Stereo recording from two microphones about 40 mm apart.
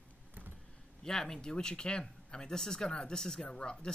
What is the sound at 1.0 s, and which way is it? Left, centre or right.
Speech, centre.